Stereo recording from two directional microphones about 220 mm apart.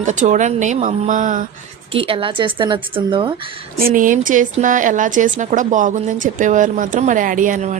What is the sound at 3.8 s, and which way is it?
A woman's voice, 40° right (ahead or behind).